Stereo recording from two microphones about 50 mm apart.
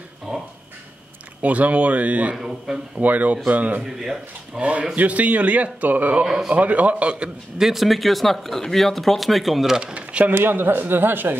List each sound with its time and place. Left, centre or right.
0.3 s dog: centre
1.4 s speech: right
2.3 s speech: centre
3.0 s speech: right
3.8 s speech: centre
4.6 s speech: right
6.2 s speech: centre
6.5 s speech: right
7.5 s speech: centre
9.9 s speech: right
10.3 s speech: right